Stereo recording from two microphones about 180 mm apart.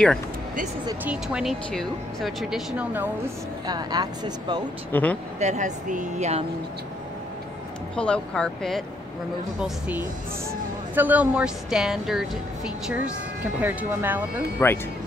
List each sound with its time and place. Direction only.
1.0 s speech: 5° right (ahead or behind)
3.6 s speech: 20° right (ahead or behind)
4.9 s speech: 10° left (ahead or behind)
5.4 s a woman's voice: 40° right (ahead or behind)
7.9 s speech: 5° left (ahead or behind)
9.6 s speech: 10° right (ahead or behind)
14.6 s speech: 15° left (ahead or behind)